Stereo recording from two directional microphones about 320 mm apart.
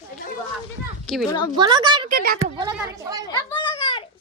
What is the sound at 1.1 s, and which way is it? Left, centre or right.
Speech, centre.